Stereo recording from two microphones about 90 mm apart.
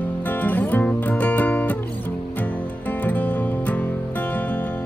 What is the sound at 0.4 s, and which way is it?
Music, 20° left (ahead or behind).